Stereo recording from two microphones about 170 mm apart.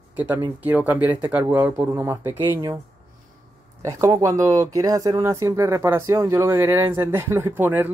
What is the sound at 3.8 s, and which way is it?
Speech, 20° right (ahead or behind).